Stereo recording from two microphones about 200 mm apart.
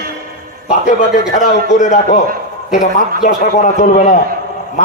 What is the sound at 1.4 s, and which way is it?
Speech, 35° left (ahead or behind).